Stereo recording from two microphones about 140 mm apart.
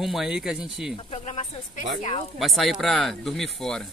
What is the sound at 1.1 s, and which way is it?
Speech, 50° left (ahead or behind).